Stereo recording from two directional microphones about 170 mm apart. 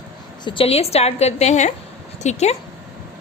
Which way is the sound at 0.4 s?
30° left (ahead or behind).